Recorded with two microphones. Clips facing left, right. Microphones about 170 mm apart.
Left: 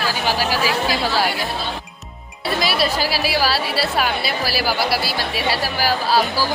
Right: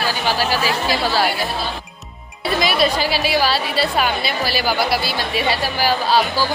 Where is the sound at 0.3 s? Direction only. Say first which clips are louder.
Right 1 dB; 10° left (ahead or behind).